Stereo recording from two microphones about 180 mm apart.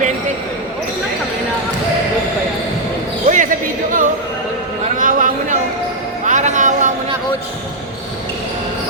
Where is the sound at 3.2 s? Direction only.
45° right (ahead or behind).